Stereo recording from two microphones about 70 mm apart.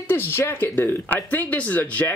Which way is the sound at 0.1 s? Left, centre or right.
Left.